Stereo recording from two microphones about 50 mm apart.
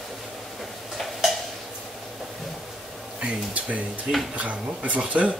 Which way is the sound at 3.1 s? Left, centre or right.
Right.